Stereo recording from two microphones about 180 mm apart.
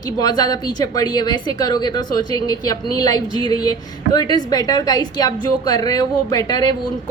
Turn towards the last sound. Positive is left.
turn(degrees=20)  # may be behind; listen again after turning